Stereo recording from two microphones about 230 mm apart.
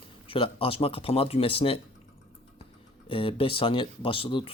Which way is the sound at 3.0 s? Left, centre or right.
Left.